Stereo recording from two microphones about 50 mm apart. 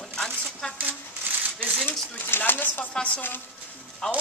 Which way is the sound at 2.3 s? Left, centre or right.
Left.